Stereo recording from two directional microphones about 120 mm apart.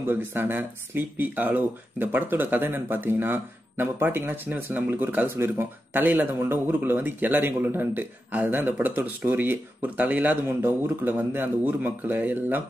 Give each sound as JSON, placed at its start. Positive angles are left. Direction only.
{"t": 0.0, "sound": "speech", "side_deg": -20}